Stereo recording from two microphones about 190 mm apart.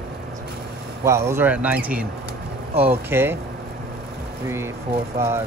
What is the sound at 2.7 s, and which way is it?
Speech, 30° right (ahead or behind).